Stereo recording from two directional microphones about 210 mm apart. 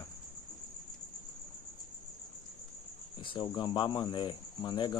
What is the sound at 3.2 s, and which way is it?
Speech, 20° left (ahead or behind).